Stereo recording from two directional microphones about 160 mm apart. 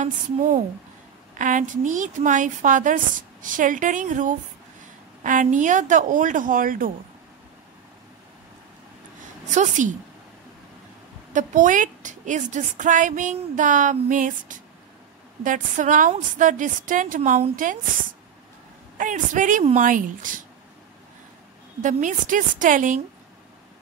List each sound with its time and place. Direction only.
0.0 s a woman's voice: 55° right (ahead or behind)
9.5 s a woman's voice: 50° right (ahead or behind)
11.3 s a woman's voice: 55° right (ahead or behind)
18.9 s speech: 55° right (ahead or behind)
21.8 s speech: 55° right (ahead or behind)